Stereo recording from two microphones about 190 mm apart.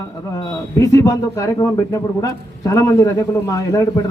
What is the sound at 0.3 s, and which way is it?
A man's voice, 15° left (ahead or behind).